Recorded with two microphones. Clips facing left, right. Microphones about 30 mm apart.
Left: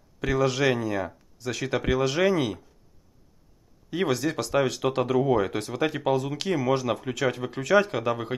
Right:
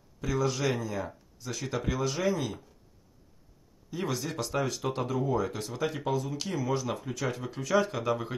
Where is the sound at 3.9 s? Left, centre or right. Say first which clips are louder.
Left 8 dB; left.